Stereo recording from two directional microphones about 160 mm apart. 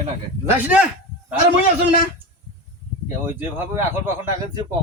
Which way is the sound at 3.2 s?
10° right (ahead or behind).